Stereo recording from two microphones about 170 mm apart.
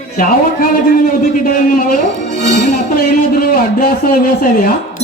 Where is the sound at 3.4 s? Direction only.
60° left (ahead or behind).